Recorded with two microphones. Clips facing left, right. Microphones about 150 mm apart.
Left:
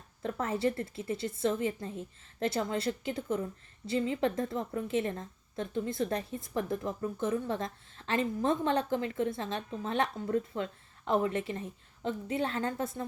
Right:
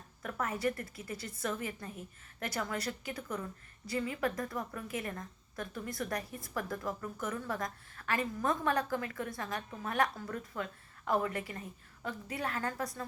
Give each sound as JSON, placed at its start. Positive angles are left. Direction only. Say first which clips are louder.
{"t": 0.2, "sound": "a woman's voice", "louder": "left 4 dB", "side_deg": 25}